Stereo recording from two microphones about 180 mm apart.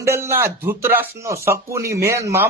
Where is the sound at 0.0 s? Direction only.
15° right (ahead or behind).